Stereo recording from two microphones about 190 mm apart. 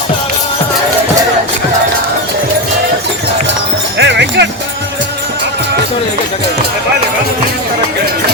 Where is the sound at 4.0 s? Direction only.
65° right (ahead or behind).